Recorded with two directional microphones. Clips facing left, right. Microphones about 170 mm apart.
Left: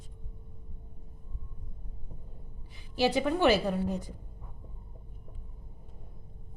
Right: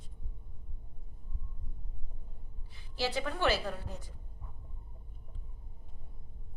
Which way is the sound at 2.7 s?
15° left (ahead or behind).